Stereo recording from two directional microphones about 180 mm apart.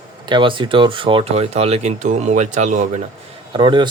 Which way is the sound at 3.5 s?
25° right (ahead or behind).